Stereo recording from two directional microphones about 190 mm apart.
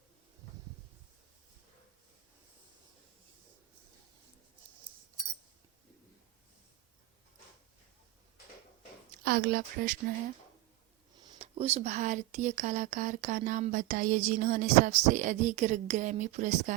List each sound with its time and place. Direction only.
9.2 s speech: 55° right (ahead or behind)
11.2 s speech: 25° right (ahead or behind); by 16.7 s 40° right (ahead or behind)